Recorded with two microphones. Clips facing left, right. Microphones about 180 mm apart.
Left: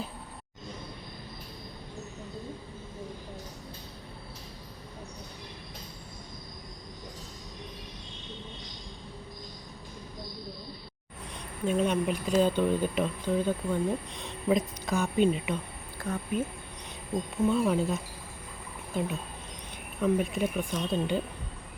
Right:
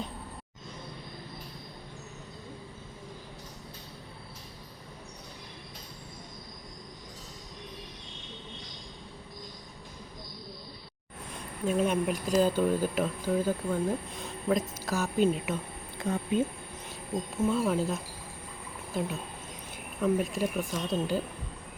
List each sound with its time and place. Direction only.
11.6 s speech: 5° right (ahead or behind)
16.0 s speech: 25° right (ahead or behind)
17.3 s speech: 5° right (ahead or behind)